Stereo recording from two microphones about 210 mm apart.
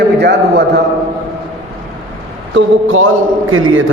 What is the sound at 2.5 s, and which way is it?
A man's voice, 70° right (ahead or behind).